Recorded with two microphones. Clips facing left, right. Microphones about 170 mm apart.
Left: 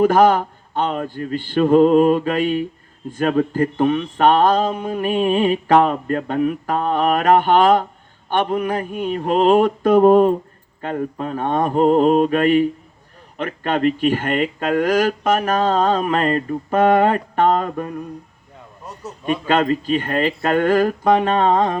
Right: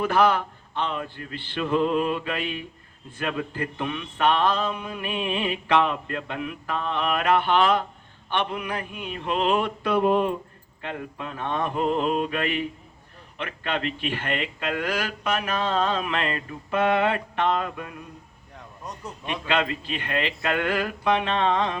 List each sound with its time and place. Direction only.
0.0 s mantra: 40° left (ahead or behind)
3.2 s speech: 40° left (ahead or behind)
19.2 s speech: 45° left (ahead or behind)